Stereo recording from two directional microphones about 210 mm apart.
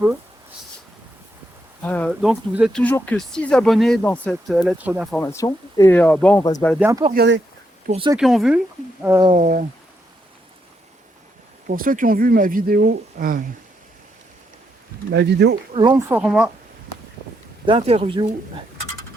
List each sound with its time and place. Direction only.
1.8 s speech: 10° left (ahead or behind)
2.8 s speech: 5° left (ahead or behind)
5.1 s speech: 15° left (ahead or behind)
6.7 s speech: 10° right (ahead or behind)
7.1 s speech: 55° right (ahead or behind)
7.9 s speech: 25° right (ahead or behind)
8.1 s speech: centre (ahead or behind)
9.0 s speech: 15° right (ahead or behind)
9.3 s speech: 40° right (ahead or behind)
11.7 s speech: 40° right (ahead or behind)
15.1 s speech: 55° right (ahead or behind)
15.7 s speech: 20° right (ahead or behind); by 16.5 s 5° right (ahead or behind)
17.7 s speech: 25° right (ahead or behind)